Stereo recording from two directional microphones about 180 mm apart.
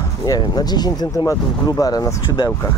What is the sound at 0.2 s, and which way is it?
Speech, 20° left (ahead or behind).